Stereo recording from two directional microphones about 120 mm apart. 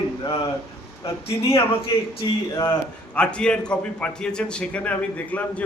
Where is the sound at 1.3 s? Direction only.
55° left (ahead or behind).